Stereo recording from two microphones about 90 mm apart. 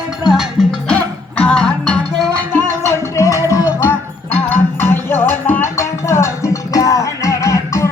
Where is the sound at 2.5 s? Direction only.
25° left (ahead or behind).